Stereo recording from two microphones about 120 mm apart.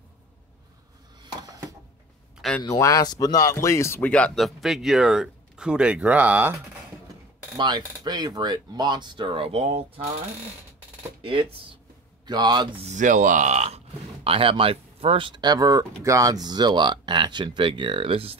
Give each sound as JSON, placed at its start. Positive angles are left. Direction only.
{"t": 1.4, "sound": "a sound", "side_deg": -30}
{"t": 2.6, "sound": "speech", "side_deg": 30}
{"t": 7.5, "sound": "speech", "side_deg": -35}
{"t": 12.3, "sound": "speech", "side_deg": -35}
{"t": 12.8, "sound": "speech", "side_deg": -90}